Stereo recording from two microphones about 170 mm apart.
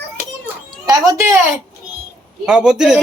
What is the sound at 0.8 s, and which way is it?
Speech, 20° right (ahead or behind).